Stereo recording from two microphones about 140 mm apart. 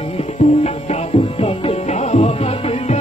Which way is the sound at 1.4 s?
45° left (ahead or behind).